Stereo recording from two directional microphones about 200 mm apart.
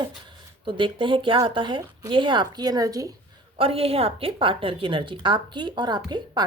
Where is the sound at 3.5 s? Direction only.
30° right (ahead or behind).